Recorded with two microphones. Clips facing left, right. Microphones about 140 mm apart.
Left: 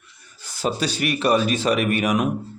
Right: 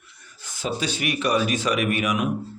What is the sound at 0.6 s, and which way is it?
Speech, 40° left (ahead or behind).